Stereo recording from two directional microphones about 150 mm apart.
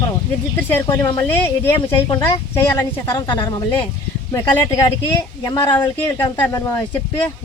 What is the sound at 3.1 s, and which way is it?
Speech, 30° left (ahead or behind).